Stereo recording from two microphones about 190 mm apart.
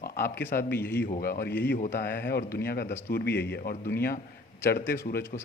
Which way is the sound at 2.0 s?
55° left (ahead or behind).